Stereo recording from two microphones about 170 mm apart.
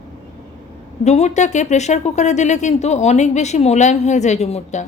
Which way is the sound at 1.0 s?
40° left (ahead or behind).